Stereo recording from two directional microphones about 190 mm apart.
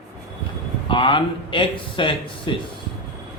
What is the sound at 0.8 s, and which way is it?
Speech, 25° left (ahead or behind).